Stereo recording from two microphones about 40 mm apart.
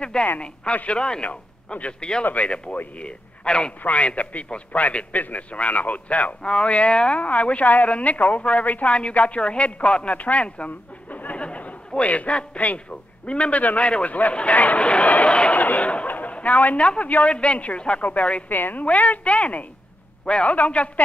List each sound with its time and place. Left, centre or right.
0.0 s radio: left
0.8 s a man's voice: left
6.4 s speech: left
7.2 s a man's voice: left
11.3 s a sound: left
13.3 s a man's voice: left
15.5 s a sound: left
16.1 s a sound: left
16.3 s speech: left
16.8 s a man's voice: left
18.5 s a woman's voice: left
18.9 s a man's voice: left